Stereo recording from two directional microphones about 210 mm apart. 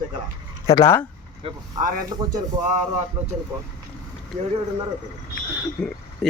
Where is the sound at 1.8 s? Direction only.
40° right (ahead or behind).